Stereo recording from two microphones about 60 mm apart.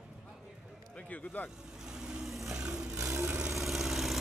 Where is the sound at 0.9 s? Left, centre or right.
Left.